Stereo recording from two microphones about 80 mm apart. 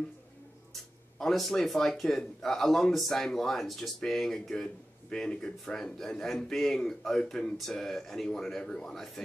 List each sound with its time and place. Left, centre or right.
1.1 s a man's voice: centre